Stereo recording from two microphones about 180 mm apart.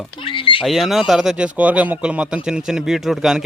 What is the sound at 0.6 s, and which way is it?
Speech, centre (ahead or behind).